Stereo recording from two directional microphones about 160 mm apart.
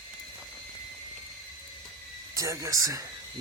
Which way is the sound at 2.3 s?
20° right (ahead or behind).